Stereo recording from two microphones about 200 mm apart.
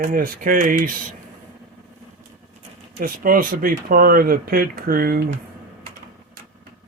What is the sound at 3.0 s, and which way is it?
Speech, 45° right (ahead or behind).